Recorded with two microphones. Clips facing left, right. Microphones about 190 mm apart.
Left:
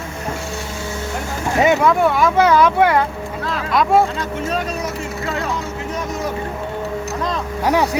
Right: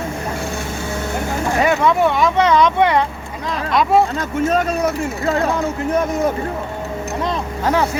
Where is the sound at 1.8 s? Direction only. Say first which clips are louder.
Even; centre (ahead or behind).